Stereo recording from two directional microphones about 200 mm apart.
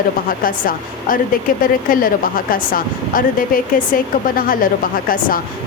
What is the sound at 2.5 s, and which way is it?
Speech, 45° left (ahead or behind).